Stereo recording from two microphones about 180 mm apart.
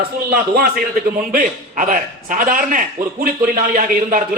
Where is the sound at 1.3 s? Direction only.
45° right (ahead or behind).